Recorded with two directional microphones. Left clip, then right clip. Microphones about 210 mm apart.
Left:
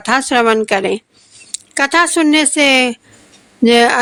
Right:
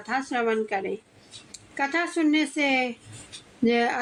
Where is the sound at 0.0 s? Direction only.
40° left (ahead or behind).